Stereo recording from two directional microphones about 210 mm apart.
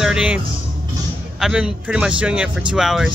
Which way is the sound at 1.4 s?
5° right (ahead or behind).